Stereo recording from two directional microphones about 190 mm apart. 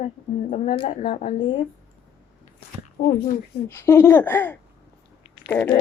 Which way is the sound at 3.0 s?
50° left (ahead or behind).